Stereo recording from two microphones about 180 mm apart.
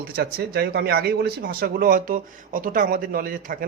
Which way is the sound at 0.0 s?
60° right (ahead or behind).